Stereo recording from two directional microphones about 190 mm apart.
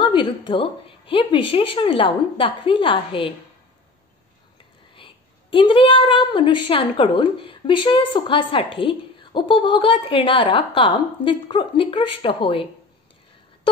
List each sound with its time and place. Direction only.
0.0 s a woman's voice: 25° left (ahead or behind)
4.9 s a woman's voice: 30° left (ahead or behind)